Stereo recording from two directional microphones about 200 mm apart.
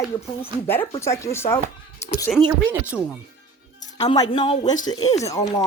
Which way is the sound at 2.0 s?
15° left (ahead or behind).